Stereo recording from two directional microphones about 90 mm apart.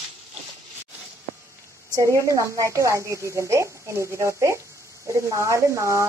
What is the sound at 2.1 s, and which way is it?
Speech, 35° right (ahead or behind).